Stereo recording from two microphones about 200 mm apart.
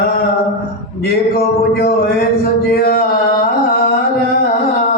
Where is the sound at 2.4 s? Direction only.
45° left (ahead or behind).